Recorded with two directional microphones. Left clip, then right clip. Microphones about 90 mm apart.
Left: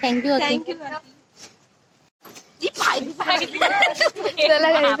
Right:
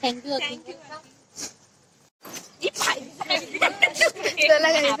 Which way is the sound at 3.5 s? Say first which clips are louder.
Even; 35° left (ahead or behind).